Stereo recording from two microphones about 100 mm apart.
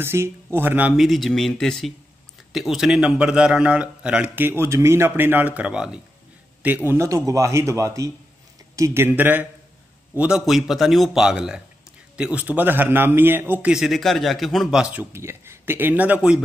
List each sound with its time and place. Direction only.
0.0 s a man's voice: 25° right (ahead or behind)
0.9 s a man's voice: centre (ahead or behind); by 13.7 s 20° right (ahead or behind)
13.7 s a man's voice: 5° right (ahead or behind)
15.1 s a man's voice: 25° right (ahead or behind)